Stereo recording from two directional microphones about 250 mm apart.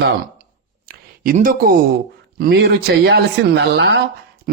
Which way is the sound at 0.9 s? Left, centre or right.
Right.